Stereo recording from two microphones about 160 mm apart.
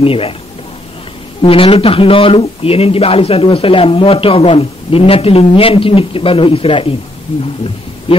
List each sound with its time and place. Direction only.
0.0 s a man's voice: 35° left (ahead or behind)
1.4 s a man's voice: 35° left (ahead or behind)